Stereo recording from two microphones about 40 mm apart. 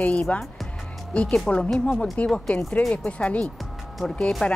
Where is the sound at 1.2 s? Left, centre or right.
Left.